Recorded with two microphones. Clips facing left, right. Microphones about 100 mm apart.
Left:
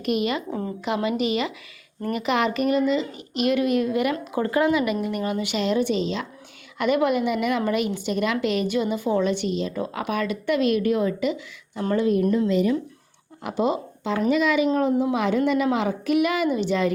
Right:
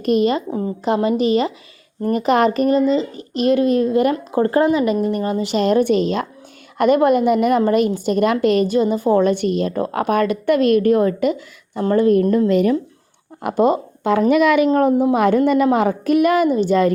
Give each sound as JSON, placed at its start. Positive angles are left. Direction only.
{"t": 0.0, "sound": "a child's voice", "side_deg": -35}
{"t": 14.7, "sound": "a woman's voice", "side_deg": -50}